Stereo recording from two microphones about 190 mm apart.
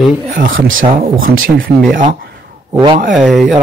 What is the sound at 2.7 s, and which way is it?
Speech, 25° right (ahead or behind).